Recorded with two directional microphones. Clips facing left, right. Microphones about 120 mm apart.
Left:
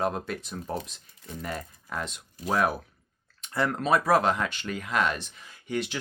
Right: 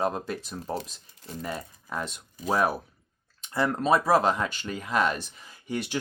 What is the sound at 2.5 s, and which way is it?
Speech, 30° right (ahead or behind).